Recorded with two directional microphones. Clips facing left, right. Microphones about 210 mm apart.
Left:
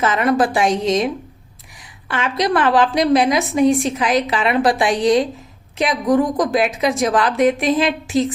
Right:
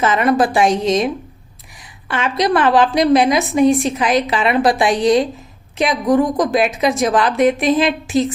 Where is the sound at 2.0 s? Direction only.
25° right (ahead or behind).